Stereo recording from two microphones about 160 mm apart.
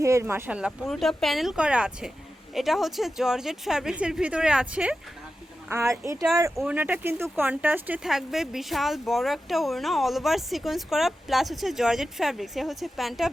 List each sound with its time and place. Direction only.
0.0 s speech: 20° right (ahead or behind); by 13.3 s centre (ahead or behind)